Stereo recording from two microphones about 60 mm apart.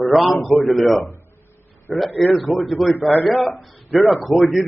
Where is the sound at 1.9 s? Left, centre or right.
Centre.